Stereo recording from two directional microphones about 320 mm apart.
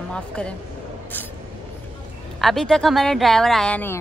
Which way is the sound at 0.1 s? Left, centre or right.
Centre.